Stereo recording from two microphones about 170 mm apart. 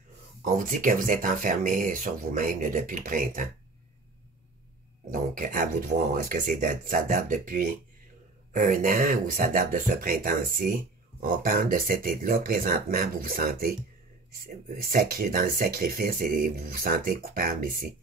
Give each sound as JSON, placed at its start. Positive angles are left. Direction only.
{"t": 0.4, "sound": "speech", "side_deg": -50}
{"t": 5.1, "sound": "speech", "side_deg": -50}